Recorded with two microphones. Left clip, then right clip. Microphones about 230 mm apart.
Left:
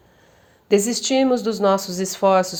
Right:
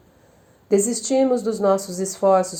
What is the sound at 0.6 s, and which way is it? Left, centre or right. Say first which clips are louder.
Speech: left 1 dB; left.